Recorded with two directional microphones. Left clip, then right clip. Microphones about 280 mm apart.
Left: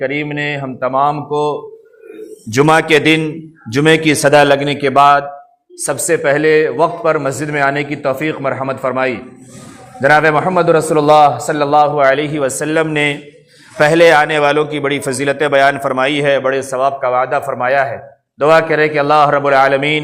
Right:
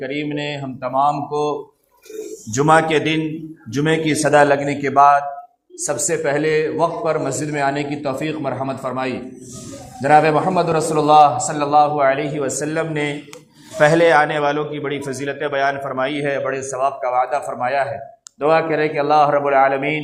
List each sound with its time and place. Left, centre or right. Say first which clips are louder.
0.0 s a man's voice: left 6 dB; left